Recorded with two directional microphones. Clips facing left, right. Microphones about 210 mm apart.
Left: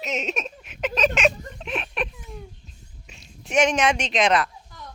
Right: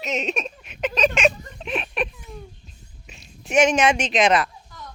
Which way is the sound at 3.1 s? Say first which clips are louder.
Right 3 dB; 5° right (ahead or behind).